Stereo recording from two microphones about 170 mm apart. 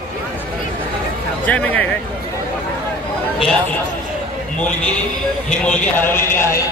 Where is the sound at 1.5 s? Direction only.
10° left (ahead or behind).